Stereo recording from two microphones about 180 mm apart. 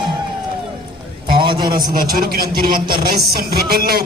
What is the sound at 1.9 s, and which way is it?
Speech, 55° right (ahead or behind).